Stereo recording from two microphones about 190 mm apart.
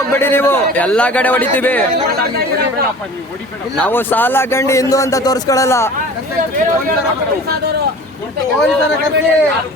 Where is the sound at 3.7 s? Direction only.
10° left (ahead or behind).